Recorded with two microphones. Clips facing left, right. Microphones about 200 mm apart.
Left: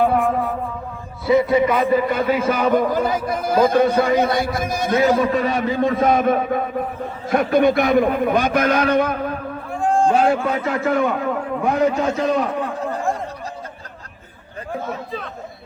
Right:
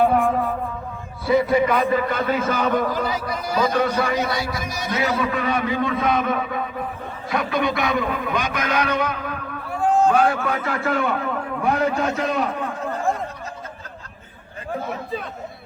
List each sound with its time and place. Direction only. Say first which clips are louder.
0.0 s a sound: even; centre (ahead or behind)
1.3 s a man's voice: left 2 dB; centre (ahead or behind)
2.9 s a man's voice: left 4 dB; 50° left (ahead or behind)
3.8 s a man's voice: left 5 dB; 25° left (ahead or behind)
4.2 s a man's voice: left 5 dB; 50° left (ahead or behind); by 9.6 s 35° left (ahead or behind)
9.8 s a sound: even; 5° right (ahead or behind)
10.1 s a man's voice: left 2 dB; 25° left (ahead or behind)